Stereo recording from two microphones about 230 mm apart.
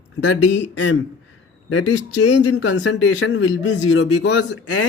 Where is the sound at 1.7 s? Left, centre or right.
Left.